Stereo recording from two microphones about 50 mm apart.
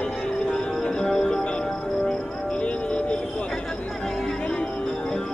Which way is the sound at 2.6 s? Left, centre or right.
Left.